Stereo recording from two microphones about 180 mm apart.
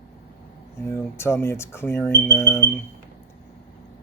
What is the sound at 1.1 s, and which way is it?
Speech, 15° left (ahead or behind).